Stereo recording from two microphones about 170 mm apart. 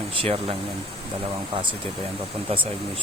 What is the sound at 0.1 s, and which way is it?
Speech, 35° right (ahead or behind).